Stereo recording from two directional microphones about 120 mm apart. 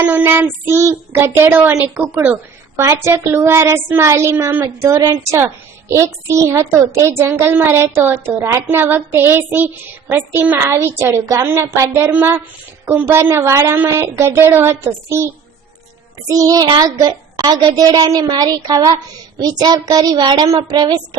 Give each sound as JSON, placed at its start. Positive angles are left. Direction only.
{"t": 0.0, "sound": "child singing", "side_deg": -15}
{"t": 2.3, "sound": "speech", "side_deg": -25}
{"t": 12.1, "sound": "child singing", "side_deg": -15}
{"t": 12.8, "sound": "speech", "side_deg": -20}
{"t": 16.3, "sound": "a child's voice", "side_deg": -30}